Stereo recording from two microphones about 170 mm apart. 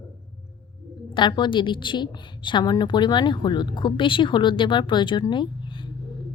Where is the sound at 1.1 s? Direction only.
25° left (ahead or behind).